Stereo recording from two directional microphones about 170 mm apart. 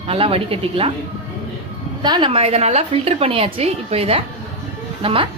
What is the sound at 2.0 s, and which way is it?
A woman's voice, 25° right (ahead or behind).